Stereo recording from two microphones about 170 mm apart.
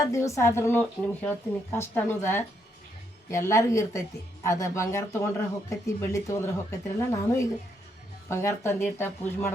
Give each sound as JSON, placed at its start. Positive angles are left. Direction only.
{"t": 0.0, "sound": "speech", "side_deg": 15}